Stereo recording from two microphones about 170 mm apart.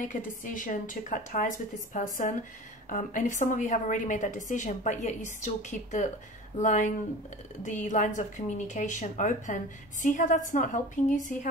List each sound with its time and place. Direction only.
0.0 s a woman's voice: 50° left (ahead or behind)